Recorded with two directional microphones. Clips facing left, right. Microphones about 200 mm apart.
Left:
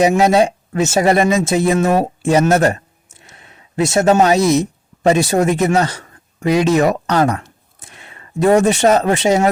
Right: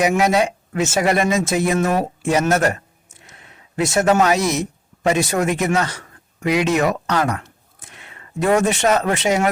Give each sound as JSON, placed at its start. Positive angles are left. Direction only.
{"t": 0.0, "sound": "speech", "side_deg": 30}